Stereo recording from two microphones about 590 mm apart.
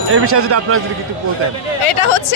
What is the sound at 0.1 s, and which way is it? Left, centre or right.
Speech, right.